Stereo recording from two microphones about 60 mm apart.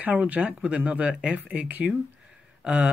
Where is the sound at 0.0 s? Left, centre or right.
Right.